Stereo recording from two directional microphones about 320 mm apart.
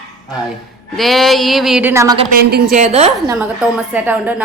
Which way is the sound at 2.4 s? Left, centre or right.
Right.